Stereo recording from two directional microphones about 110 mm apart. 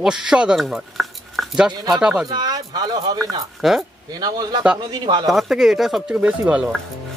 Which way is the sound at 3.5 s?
5° right (ahead or behind).